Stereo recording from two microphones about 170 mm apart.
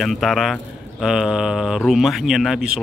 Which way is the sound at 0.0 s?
Centre (ahead or behind).